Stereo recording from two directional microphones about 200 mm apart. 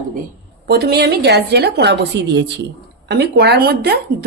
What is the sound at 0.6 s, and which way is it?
A woman's voice, 55° right (ahead or behind).